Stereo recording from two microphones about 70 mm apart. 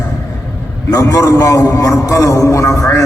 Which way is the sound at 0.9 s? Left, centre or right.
Left.